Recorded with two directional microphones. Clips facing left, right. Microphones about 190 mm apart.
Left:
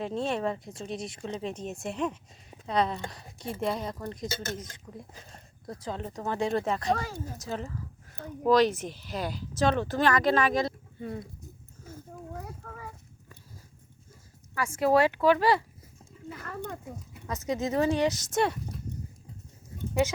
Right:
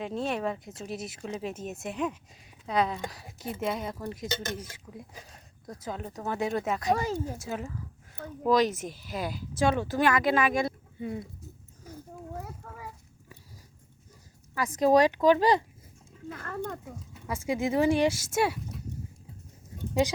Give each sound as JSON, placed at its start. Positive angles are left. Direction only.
{"t": 0.0, "sound": "speech", "side_deg": 0}
{"t": 7.0, "sound": "speech", "side_deg": -20}
{"t": 7.4, "sound": "speech", "side_deg": -10}
{"t": 8.6, "sound": "speech", "side_deg": -45}
{"t": 9.0, "sound": "speech", "side_deg": -5}
{"t": 14.8, "sound": "speech", "side_deg": -15}
{"t": 16.3, "sound": "speech", "side_deg": 5}
{"t": 17.2, "sound": "speech", "side_deg": -10}
{"t": 19.9, "sound": "speech", "side_deg": -15}